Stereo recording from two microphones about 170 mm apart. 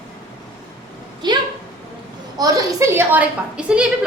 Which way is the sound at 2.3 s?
20° right (ahead or behind).